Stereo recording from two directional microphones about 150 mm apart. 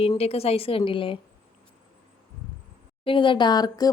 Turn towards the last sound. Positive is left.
turn(degrees=25)  # may be behind; listen again after turning